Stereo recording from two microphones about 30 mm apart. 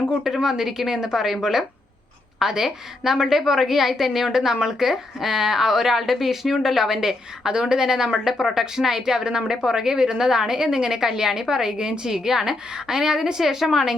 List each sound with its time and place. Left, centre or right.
0.3 s a woman's voice: centre
8.2 s a woman's voice: centre